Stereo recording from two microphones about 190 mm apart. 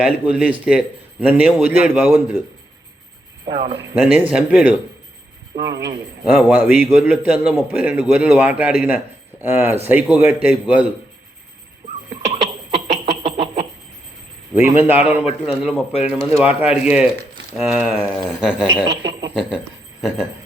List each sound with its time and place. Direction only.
0.0 s a sound: 5° right (ahead or behind)
0.6 s a man's voice: 5° right (ahead or behind)
3.4 s speech: 25° right (ahead or behind)
3.9 s a man's voice: 5° right (ahead or behind)
5.7 s a man's voice: 60° right (ahead or behind)
6.2 s a man's voice: 5° right (ahead or behind)
12.3 s a sound: 35° right (ahead or behind)
14.5 s a man's voice: 10° right (ahead or behind)
15.4 s a sound: 5° right (ahead or behind)
15.9 s speech: 35° left (ahead or behind)
16.3 s a man's voice: 5° right (ahead or behind)
17.6 s a sound: 5° right (ahead or behind)
18.9 s speech: 20° right (ahead or behind)
19.3 s speech: 5° right (ahead or behind)